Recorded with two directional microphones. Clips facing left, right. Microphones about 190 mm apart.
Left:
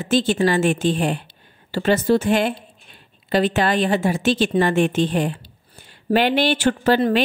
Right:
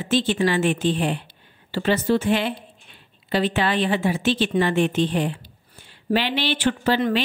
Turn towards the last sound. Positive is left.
turn(degrees=45)  # may be behind; listen again after turning